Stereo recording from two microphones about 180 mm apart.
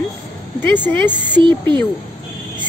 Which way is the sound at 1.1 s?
25° right (ahead or behind).